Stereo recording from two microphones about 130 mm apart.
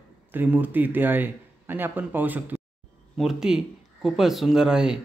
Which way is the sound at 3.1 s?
Centre (ahead or behind).